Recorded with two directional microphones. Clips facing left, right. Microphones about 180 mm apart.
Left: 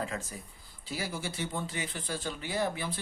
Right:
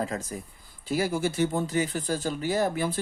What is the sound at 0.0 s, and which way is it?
Speech, 40° right (ahead or behind).